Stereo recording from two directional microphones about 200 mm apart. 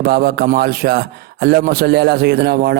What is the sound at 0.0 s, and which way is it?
A man's voice, 50° right (ahead or behind).